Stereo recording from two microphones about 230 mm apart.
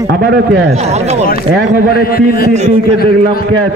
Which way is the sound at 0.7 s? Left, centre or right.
Right.